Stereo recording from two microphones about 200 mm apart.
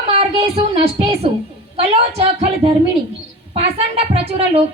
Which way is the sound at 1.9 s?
30° right (ahead or behind).